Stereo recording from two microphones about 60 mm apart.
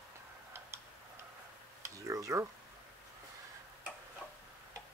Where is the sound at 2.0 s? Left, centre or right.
Right.